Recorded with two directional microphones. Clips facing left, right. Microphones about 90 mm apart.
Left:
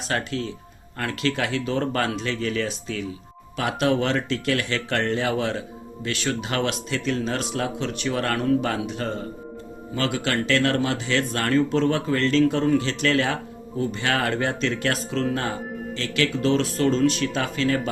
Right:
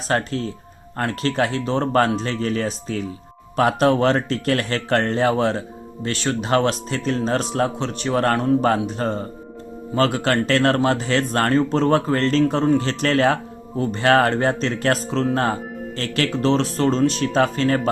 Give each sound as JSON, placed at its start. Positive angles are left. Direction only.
{"t": 0.1, "sound": "speech", "side_deg": -35}